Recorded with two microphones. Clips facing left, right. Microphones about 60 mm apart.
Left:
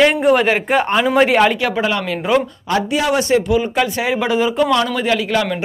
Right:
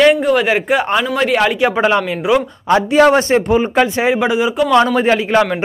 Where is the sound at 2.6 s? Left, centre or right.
Right; by 4.5 s centre.